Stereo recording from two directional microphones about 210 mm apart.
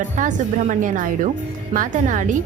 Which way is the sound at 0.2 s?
35° right (ahead or behind).